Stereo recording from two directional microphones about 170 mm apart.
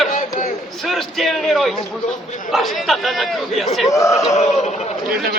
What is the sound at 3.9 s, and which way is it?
Speech, 20° left (ahead or behind).